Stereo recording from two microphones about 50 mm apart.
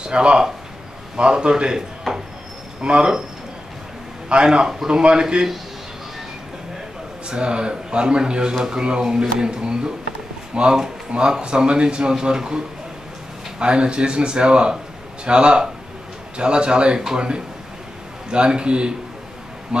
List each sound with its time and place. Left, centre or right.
0.0 s speech: centre
4.3 s speech: centre
7.2 s speech: centre